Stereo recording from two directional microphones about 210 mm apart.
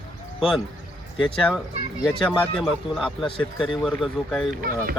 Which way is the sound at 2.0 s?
Centre (ahead or behind).